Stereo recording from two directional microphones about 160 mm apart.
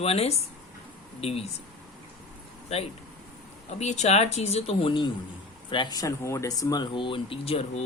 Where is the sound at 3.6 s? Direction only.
45° left (ahead or behind).